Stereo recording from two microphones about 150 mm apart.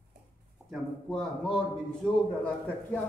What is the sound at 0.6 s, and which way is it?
Speech, centre (ahead or behind).